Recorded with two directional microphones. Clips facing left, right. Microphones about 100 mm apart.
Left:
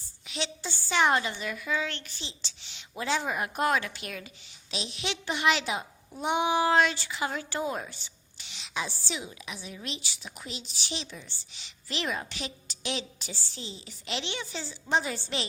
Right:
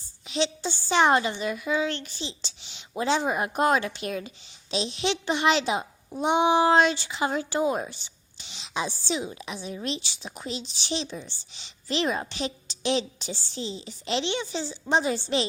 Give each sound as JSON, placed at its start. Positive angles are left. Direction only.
{"t": 0.3, "sound": "a child's voice", "side_deg": -25}